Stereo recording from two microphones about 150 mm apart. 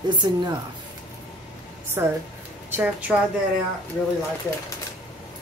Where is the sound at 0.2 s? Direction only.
35° right (ahead or behind).